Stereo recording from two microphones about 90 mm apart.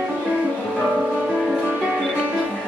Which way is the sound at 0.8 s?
10° right (ahead or behind).